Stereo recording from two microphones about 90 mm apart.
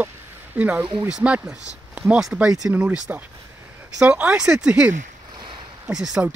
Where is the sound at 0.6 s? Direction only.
15° right (ahead or behind).